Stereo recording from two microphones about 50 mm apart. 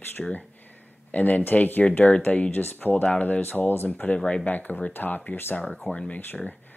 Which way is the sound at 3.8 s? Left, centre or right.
Left.